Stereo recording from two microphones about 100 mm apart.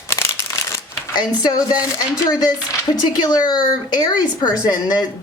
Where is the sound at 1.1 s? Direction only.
40° left (ahead or behind).